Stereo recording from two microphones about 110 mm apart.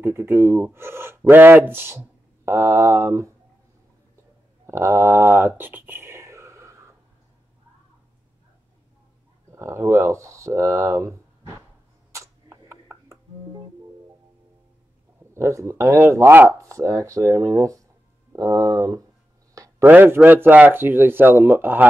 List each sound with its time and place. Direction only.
0.0 s speech: 20° right (ahead or behind)
4.6 s speech: 25° right (ahead or behind)
5.6 s whispering: 20° right (ahead or behind)
9.5 s speech: 25° right (ahead or behind)
12.1 s a sound: 25° right (ahead or behind)
15.3 s speech: 25° right (ahead or behind)
19.8 s speech: 15° right (ahead or behind)